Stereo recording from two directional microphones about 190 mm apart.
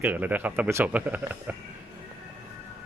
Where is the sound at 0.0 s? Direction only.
10° right (ahead or behind).